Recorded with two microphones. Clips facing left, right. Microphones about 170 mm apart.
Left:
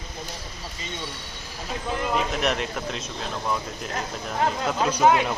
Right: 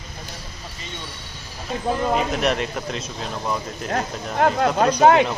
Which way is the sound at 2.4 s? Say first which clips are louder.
Right 3 dB; centre (ahead or behind).